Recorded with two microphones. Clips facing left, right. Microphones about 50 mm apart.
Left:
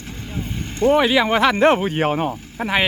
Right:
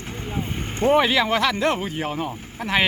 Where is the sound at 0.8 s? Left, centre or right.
Right.